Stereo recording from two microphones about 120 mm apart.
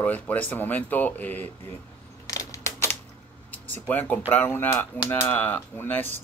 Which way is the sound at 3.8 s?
15° left (ahead or behind).